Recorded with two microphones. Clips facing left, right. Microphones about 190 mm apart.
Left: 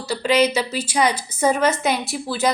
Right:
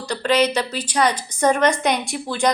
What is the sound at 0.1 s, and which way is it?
Speech, 5° left (ahead or behind).